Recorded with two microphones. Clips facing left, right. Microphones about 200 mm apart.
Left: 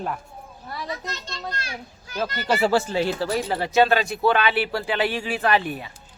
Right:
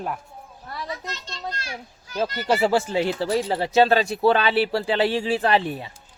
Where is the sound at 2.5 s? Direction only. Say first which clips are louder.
Even; 20° right (ahead or behind).